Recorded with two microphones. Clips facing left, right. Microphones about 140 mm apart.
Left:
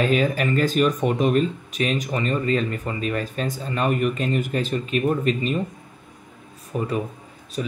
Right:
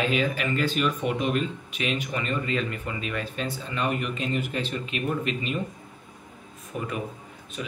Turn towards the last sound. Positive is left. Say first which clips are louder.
# left 7 dB
turn(degrees=35)  # may be behind; listen again after turning